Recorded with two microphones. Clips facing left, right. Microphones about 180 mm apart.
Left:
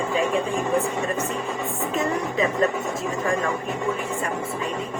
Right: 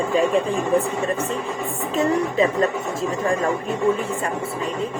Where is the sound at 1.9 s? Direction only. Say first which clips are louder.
Right 6 dB; 30° right (ahead or behind).